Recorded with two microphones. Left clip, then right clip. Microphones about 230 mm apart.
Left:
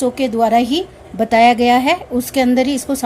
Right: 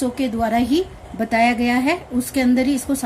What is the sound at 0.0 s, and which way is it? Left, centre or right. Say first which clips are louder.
A woman's voice: left 6 dB; left.